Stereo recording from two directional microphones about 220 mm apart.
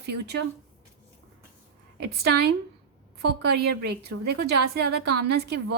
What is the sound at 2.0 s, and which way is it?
A woman's voice, 45° right (ahead or behind).